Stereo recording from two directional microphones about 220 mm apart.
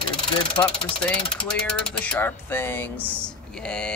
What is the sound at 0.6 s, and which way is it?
Speech, 15° left (ahead or behind).